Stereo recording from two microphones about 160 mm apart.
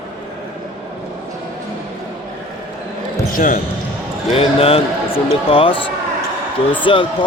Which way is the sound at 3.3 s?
55° left (ahead or behind).